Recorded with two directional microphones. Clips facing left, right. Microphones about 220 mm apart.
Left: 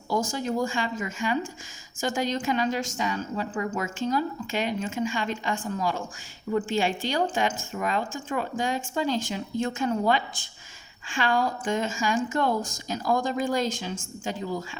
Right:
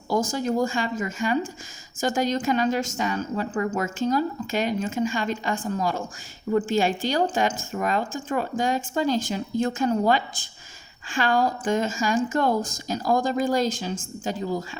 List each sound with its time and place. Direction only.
0.3 s a woman's voice: 45° right (ahead or behind)